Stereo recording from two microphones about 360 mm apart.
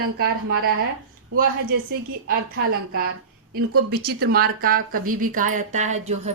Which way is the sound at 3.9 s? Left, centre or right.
Right.